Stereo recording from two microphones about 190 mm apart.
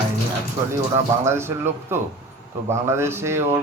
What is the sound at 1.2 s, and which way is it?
Speech, 15° right (ahead or behind).